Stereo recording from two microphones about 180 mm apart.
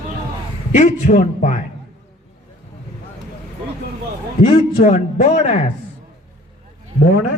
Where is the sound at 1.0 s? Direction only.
40° left (ahead or behind).